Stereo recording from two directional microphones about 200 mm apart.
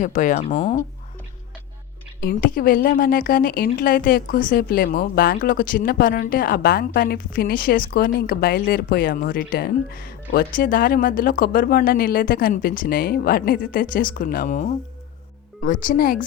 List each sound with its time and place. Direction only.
0.0 s speech: 40° left (ahead or behind)
2.2 s a woman's voice: 45° left (ahead or behind)